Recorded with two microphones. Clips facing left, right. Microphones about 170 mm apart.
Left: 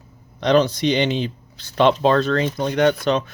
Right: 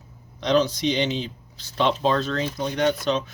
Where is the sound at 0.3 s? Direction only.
60° left (ahead or behind).